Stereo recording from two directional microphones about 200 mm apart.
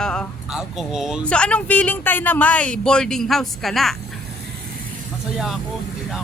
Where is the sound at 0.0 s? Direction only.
5° left (ahead or behind).